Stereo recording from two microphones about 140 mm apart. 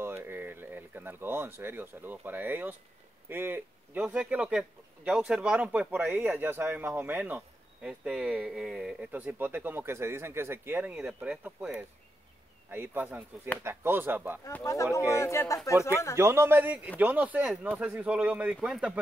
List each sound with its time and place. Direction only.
0.0 s speech: 15° right (ahead or behind)
14.6 s speech: 20° left (ahead or behind)
16.2 s speech: 20° right (ahead or behind)